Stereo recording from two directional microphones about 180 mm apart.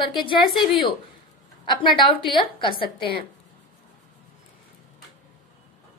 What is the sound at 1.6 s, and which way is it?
A woman's voice, 25° left (ahead or behind).